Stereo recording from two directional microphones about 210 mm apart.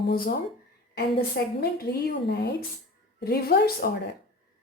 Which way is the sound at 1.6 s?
50° left (ahead or behind).